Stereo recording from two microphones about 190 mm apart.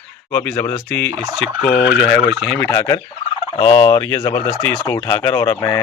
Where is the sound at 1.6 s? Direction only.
55° left (ahead or behind).